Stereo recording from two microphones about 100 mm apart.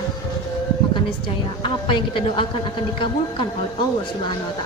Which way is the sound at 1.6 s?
60° left (ahead or behind).